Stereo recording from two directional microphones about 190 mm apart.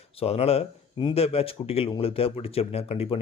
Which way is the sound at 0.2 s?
30° left (ahead or behind).